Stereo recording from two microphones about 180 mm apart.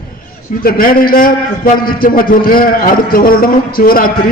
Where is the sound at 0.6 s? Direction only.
55° left (ahead or behind).